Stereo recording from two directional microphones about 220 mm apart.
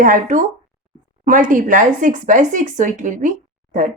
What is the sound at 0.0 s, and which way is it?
Speech, 35° right (ahead or behind).